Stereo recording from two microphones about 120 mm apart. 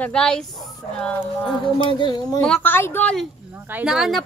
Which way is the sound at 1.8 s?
40° left (ahead or behind).